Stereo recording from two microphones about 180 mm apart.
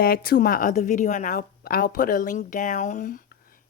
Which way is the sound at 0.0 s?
55° left (ahead or behind).